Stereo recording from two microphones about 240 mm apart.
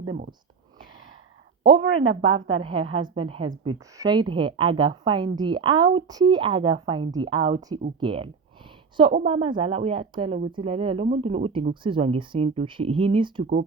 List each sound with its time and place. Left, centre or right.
1.9 s speech: right
2.2 s a woman's voice: right